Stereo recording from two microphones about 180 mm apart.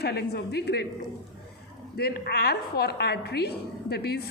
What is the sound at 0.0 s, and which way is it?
Speech, 65° left (ahead or behind).